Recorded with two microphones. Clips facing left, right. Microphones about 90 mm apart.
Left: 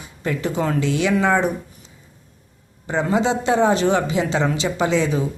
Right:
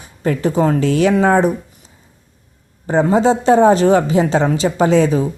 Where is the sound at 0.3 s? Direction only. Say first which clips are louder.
Right 7 dB; 40° right (ahead or behind).